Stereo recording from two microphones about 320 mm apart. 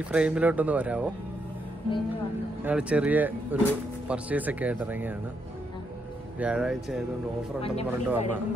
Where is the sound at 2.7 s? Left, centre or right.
Centre.